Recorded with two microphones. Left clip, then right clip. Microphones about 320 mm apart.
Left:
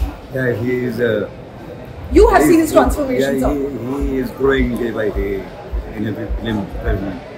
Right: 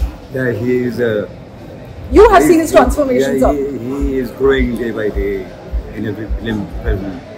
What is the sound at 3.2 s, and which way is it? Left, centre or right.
Speech, centre.